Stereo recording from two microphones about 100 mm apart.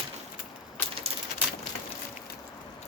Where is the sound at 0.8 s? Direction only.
20° left (ahead or behind).